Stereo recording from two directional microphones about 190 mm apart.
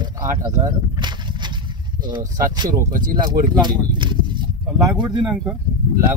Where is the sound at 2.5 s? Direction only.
20° right (ahead or behind).